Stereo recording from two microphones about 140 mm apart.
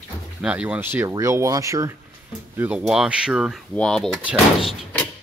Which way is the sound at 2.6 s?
10° right (ahead or behind).